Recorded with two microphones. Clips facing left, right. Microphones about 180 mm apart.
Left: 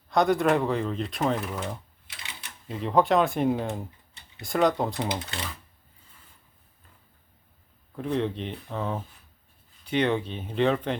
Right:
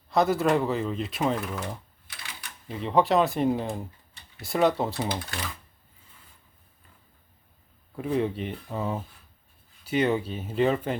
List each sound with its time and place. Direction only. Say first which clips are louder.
0.1 s speech: left 1 dB; 5° right (ahead or behind)
2.0 s typewriter: right 1 dB; 25° left (ahead or behind)
2.6 s speech: left 1 dB; centre (ahead or behind)
5.2 s speech: even; 25° left (ahead or behind)
7.9 s speech: right 1 dB; 5° right (ahead or behind)